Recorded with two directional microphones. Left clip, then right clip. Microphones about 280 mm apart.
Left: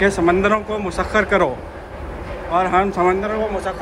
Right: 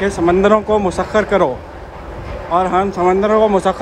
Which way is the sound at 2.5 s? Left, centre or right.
Centre.